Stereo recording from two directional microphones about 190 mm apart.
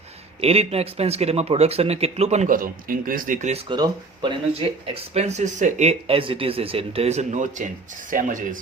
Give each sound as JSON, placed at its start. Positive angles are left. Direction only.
{"t": 0.4, "sound": "speech", "side_deg": -30}
{"t": 3.7, "sound": "speech", "side_deg": -25}
{"t": 5.1, "sound": "speech", "side_deg": -40}